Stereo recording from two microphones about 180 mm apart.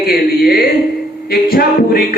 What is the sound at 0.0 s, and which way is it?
Speech, 55° left (ahead or behind).